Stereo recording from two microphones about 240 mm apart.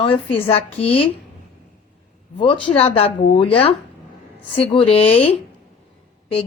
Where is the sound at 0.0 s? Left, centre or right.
Left.